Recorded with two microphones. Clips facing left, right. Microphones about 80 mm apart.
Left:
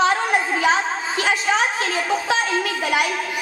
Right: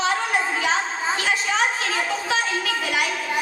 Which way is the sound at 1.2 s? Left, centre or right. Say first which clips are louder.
Left 4 dB; left.